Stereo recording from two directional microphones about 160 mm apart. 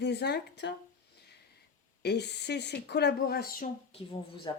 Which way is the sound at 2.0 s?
90° left.